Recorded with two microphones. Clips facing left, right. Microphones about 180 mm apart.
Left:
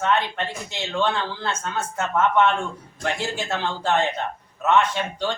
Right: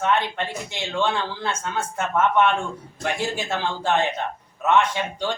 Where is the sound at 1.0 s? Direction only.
10° right (ahead or behind).